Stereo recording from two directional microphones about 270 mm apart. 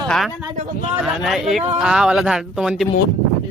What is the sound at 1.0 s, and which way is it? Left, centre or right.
Speech, centre.